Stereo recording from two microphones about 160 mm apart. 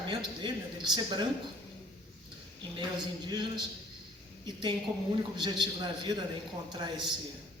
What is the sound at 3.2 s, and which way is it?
A man's voice, 30° right (ahead or behind).